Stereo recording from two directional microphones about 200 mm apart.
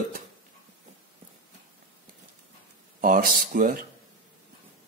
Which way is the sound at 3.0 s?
45° right (ahead or behind).